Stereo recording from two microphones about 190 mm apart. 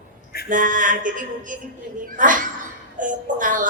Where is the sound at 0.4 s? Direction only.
45° right (ahead or behind).